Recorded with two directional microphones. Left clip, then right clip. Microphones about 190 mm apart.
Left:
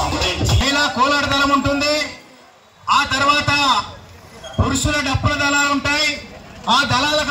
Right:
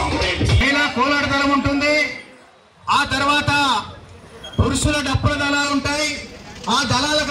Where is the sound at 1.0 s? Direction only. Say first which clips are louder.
Left 2 dB; 30° right (ahead or behind).